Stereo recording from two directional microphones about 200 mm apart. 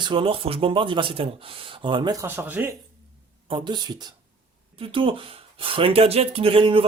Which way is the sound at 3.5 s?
25° right (ahead or behind).